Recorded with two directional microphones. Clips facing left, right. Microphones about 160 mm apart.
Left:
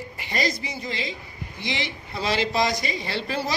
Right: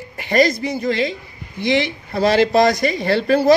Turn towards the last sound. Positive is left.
turn(degrees=-55)  # may be behind; listen again after turning